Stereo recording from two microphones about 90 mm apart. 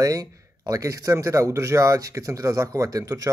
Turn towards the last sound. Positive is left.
turn(degrees=-40)  # may be behind; listen again after turning